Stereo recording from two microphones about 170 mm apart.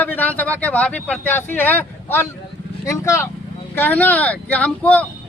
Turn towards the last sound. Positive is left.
turn(degrees=10)  # may be behind; listen again after turning